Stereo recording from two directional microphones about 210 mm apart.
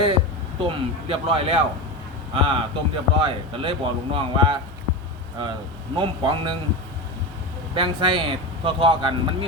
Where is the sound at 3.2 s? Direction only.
25° right (ahead or behind).